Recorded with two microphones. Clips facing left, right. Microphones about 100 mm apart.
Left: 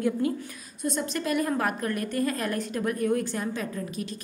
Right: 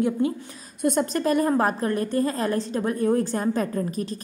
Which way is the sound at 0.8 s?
60° right (ahead or behind).